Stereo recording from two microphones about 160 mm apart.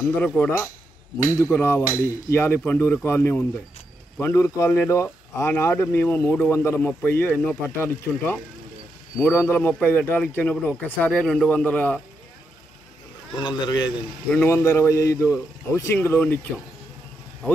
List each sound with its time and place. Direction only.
0.4 s a man's voice: 15° left (ahead or behind)
13.4 s a man's voice: 30° left (ahead or behind)
14.3 s a man's voice: 15° left (ahead or behind)